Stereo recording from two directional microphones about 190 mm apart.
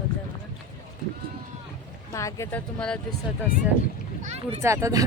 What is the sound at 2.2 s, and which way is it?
Speech, 15° left (ahead or behind).